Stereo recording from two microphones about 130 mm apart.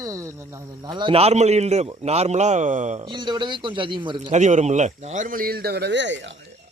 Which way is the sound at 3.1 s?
35° right (ahead or behind).